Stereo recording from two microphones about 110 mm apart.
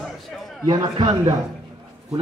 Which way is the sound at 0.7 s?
30° right (ahead or behind).